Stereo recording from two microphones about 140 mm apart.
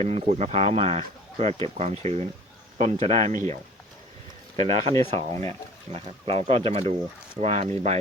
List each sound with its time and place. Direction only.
0.0 s speech: 50° right (ahead or behind)
4.5 s speech: 45° right (ahead or behind)